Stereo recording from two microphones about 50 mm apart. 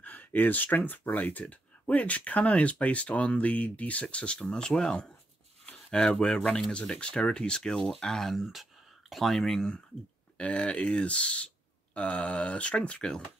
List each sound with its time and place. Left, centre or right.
0.0 s speech: left; by 8.4 s centre
8.4 s speech: centre
10.3 s speech: left